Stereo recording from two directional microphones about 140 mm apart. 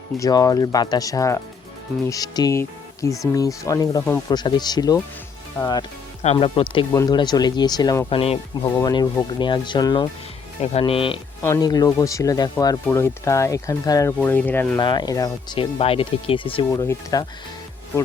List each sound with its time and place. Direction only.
0.2 s speech: 25° left (ahead or behind)
5.6 s speech: 15° left (ahead or behind)
6.2 s speech: 45° left (ahead or behind)
6.9 s speech: 25° left (ahead or behind)
10.6 s speech: 45° left (ahead or behind)
11.4 s speech: 25° left (ahead or behind)
12.8 s speech: 15° left (ahead or behind)
14.2 s speech: 10° left (ahead or behind)
14.8 s speech: 30° left (ahead or behind)
15.5 s speech: 40° left (ahead or behind)
16.7 s speech: 20° left (ahead or behind)